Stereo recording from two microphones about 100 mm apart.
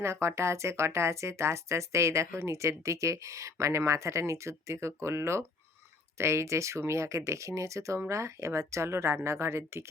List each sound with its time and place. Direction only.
0.0 s speech: 25° right (ahead or behind)